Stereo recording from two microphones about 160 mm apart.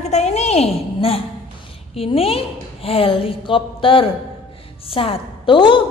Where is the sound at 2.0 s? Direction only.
35° left (ahead or behind).